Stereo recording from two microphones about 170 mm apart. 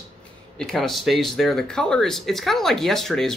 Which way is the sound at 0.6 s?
Centre (ahead or behind).